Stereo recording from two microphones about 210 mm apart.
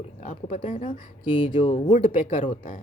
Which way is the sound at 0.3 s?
35° left (ahead or behind).